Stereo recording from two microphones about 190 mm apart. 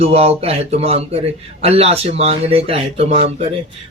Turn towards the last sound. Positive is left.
turn(degrees=-30)  # may be behind; listen again after turning